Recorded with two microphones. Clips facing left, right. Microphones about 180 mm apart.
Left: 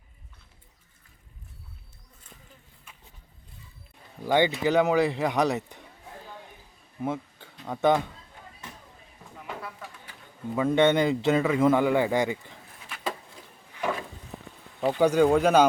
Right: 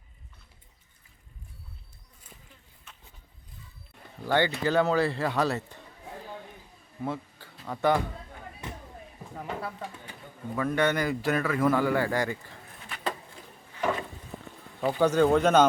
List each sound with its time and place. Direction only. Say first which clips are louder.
4.3 s speech: left 3 dB; 15° left (ahead or behind)
7.0 s a sound: left 3 dB; 20° left (ahead or behind)
7.6 s speech: left 2 dB; 20° left (ahead or behind)
9.3 s a sound: right 3 dB; 35° right (ahead or behind)
10.5 s a man's voice: left 5 dB; 20° left (ahead or behind)
14.8 s speech: left 2 dB; 5° left (ahead or behind)